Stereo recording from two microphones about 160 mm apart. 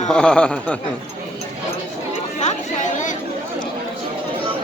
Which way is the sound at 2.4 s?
50° left (ahead or behind).